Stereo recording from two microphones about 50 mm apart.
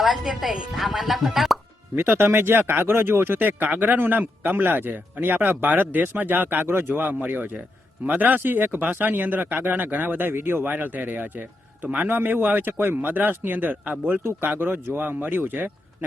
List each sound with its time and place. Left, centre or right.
0.0 s a woman's voice: centre
2.0 s speech: right
7.0 s speech: right